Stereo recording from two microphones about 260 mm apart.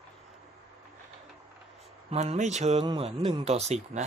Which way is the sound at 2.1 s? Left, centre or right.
Right.